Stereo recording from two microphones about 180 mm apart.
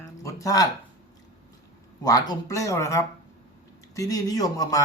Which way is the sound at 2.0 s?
20° left (ahead or behind).